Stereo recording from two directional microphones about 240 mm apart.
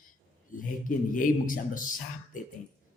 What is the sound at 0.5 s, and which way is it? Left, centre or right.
A man's voice, left.